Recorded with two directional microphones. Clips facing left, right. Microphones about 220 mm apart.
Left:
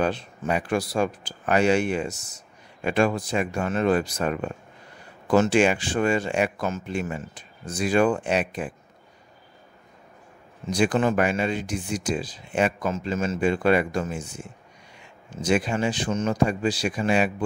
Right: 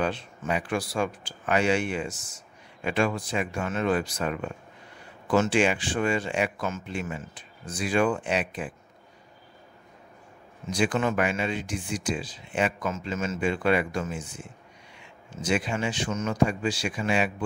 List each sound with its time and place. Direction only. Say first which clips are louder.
0.0 s speech: left 4 dB; 40° left (ahead or behind)
10.7 s speech: left 4 dB; 40° left (ahead or behind)